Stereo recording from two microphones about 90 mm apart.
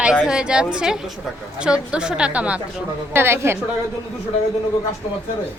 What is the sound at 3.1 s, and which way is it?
Speech, 25° right (ahead or behind).